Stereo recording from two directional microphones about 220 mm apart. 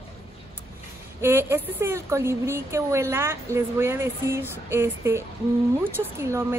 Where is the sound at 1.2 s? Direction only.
10° right (ahead or behind).